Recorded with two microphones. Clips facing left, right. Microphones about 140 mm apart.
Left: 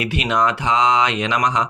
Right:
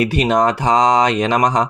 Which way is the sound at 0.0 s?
40° right (ahead or behind).